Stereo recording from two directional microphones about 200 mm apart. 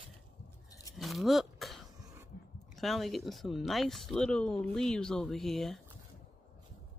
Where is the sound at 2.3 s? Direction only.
50° left (ahead or behind).